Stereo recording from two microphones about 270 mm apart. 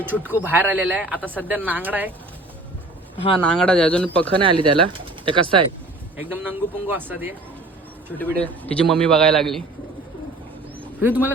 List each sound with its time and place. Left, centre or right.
0.0 s speech: centre
1.2 s a man's voice: centre
1.5 s speech: centre
3.4 s a man's voice: centre
4.4 s speech: centre
6.1 s speech: centre
8.2 s a man's voice: centre
11.0 s speech: centre